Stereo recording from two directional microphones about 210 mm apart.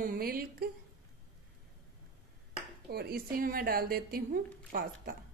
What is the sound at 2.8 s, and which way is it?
A woman's voice, 50° right (ahead or behind).